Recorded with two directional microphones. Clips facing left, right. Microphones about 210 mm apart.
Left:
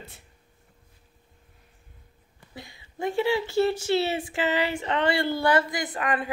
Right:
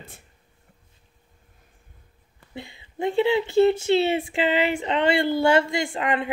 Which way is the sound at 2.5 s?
25° right (ahead or behind).